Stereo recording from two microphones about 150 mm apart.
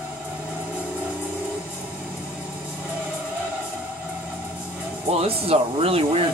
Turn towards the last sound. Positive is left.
turn(degrees=-40)  # may be behind; listen again after turning